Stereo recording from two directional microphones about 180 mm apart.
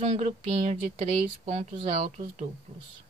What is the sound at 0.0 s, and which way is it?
Speech, 35° right (ahead or behind).